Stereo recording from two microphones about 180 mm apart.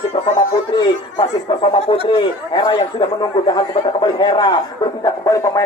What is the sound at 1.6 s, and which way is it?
A man's voice, 30° left (ahead or behind).